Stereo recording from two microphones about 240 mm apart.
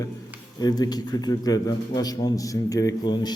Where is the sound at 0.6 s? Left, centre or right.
Centre.